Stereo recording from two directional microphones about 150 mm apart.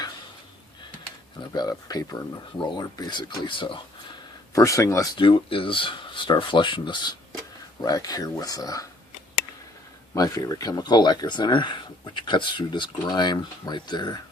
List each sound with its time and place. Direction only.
1.4 s speech: 25° left (ahead or behind)
4.5 s speech: 20° left (ahead or behind)
5.1 s speech: 35° left (ahead or behind)
10.2 s speech: 25° left (ahead or behind)